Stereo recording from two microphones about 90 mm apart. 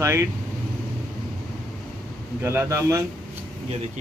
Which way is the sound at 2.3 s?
25° right (ahead or behind).